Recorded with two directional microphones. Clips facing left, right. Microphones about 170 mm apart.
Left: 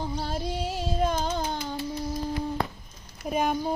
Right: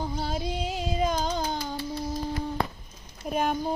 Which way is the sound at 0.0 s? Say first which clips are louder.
Even; centre (ahead or behind).